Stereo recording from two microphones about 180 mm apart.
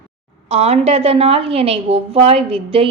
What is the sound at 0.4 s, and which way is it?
A woman's voice, 35° right (ahead or behind).